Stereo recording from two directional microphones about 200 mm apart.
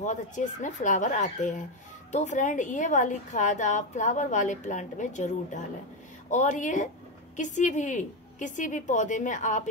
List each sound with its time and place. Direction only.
0.0 s a woman's voice: 35° left (ahead or behind)